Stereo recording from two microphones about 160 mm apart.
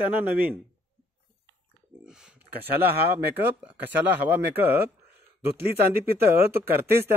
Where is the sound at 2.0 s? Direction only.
5° right (ahead or behind).